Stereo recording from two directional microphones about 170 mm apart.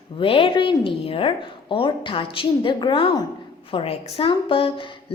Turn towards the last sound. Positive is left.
turn(degrees=30)  # may be behind; listen again after turning